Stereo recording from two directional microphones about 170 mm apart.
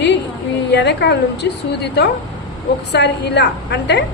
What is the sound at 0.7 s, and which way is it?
A woman's voice, 90° left.